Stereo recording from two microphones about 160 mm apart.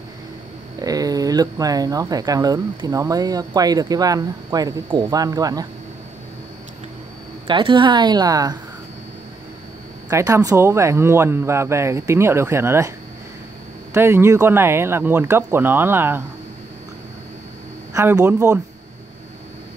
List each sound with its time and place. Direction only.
0.7 s speech: 25° right (ahead or behind)
7.4 s speech: 30° right (ahead or behind)
10.0 s speech: 20° right (ahead or behind)
13.9 s speech: 15° right (ahead or behind)
17.9 s speech: 15° right (ahead or behind)